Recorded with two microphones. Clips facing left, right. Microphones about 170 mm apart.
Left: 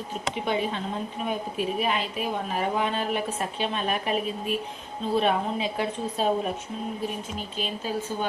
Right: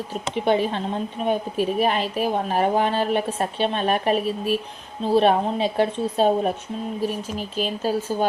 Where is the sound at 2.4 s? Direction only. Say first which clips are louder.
Right 5 dB; 35° right (ahead or behind).